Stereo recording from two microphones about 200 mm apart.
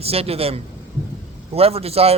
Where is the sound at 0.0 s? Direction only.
30° right (ahead or behind).